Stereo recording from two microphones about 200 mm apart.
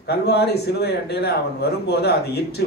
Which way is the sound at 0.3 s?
55° left (ahead or behind).